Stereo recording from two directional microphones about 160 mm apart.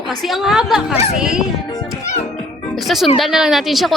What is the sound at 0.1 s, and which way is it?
A woman's voice, centre (ahead or behind).